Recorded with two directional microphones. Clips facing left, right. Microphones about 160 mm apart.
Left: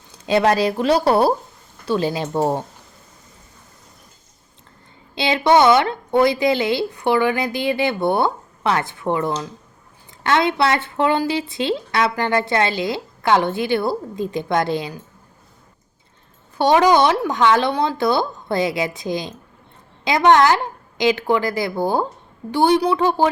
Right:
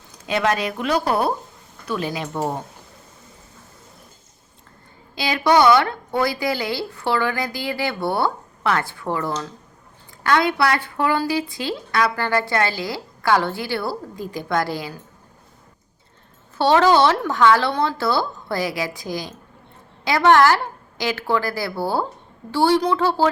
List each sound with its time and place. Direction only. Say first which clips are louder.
0.3 s a woman's voice: left 5 dB; 30° left (ahead or behind)
5.1 s a woman's voice: left 2 dB; 25° left (ahead or behind)
16.6 s a woman's voice: left 1 dB; 15° left (ahead or behind)